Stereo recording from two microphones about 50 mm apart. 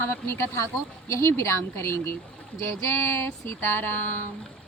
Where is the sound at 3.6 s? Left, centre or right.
Left.